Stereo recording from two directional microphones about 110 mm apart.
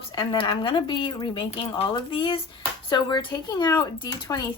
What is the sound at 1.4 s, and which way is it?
A woman's voice, 60° left (ahead or behind).